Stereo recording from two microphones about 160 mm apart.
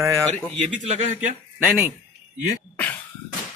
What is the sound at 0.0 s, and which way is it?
Speech, 20° right (ahead or behind).